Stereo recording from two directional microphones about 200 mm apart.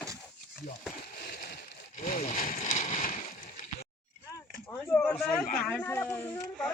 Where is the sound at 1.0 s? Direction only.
55° left (ahead or behind).